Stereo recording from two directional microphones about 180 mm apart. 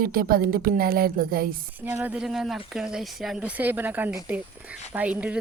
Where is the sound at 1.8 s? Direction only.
10° right (ahead or behind).